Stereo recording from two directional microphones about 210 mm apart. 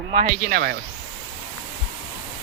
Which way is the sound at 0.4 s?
50° right (ahead or behind).